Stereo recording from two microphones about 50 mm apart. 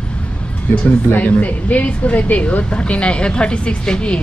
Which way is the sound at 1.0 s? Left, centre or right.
Left.